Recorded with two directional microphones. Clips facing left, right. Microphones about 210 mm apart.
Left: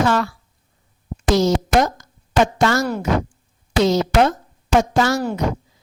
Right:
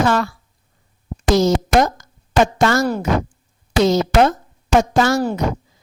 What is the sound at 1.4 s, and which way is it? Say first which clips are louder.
Speech: right 2 dB; 45° right (ahead or behind).